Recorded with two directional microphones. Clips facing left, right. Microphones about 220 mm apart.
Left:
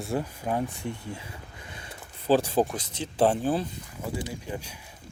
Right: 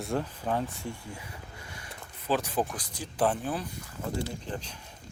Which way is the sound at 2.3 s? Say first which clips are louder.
Left 6 dB; 30° left (ahead or behind).